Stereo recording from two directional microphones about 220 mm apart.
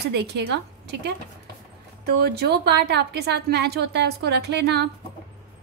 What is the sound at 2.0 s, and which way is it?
A woman's voice, 50° right (ahead or behind).